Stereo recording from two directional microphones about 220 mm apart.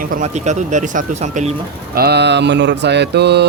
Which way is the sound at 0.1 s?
35° right (ahead or behind).